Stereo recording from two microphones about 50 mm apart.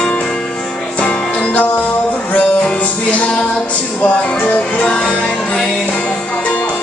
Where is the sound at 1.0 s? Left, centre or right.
Left.